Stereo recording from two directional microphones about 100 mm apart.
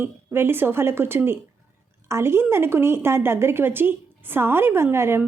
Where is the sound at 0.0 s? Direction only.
20° right (ahead or behind).